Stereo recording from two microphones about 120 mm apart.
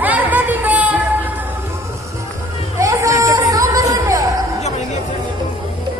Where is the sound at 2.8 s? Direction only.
25° right (ahead or behind).